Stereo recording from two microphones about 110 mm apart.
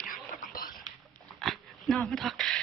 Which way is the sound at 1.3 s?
5° left (ahead or behind).